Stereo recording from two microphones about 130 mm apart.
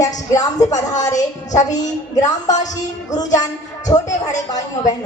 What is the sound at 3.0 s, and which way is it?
A woman's voice, 30° left (ahead or behind).